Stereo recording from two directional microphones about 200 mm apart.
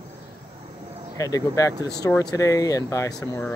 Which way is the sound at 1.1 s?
15° left (ahead or behind).